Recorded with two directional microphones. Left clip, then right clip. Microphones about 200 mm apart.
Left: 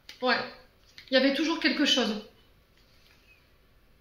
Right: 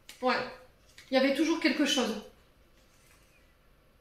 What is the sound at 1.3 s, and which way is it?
Speech, 35° left (ahead or behind).